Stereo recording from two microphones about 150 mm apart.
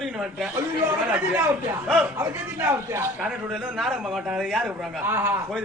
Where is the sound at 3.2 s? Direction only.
Centre (ahead or behind).